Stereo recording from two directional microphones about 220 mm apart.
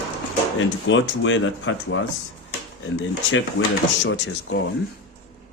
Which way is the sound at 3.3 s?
60° left (ahead or behind).